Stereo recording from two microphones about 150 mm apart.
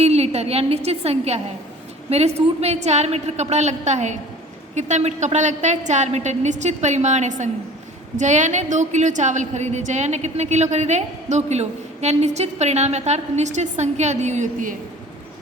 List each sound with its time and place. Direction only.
0.0 s a woman's voice: 45° right (ahead or behind)